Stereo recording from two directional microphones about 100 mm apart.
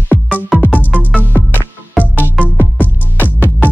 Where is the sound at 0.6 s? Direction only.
20° left (ahead or behind).